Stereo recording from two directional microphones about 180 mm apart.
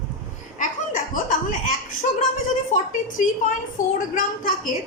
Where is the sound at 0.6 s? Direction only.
50° left (ahead or behind).